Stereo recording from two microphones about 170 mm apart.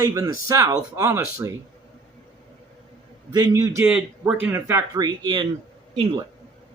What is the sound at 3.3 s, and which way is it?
Speech, 20° right (ahead or behind).